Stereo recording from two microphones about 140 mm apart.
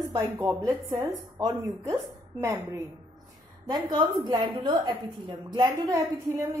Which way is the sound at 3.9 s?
30° right (ahead or behind).